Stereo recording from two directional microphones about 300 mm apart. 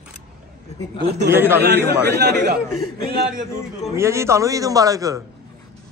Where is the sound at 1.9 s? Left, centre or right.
Right.